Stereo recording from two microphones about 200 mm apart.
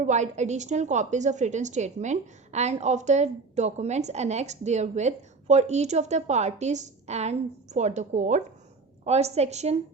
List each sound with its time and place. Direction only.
0.0 s a woman's voice: 35° right (ahead or behind)